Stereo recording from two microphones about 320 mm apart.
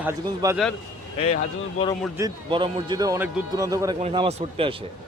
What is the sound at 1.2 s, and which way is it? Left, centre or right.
Speech, centre.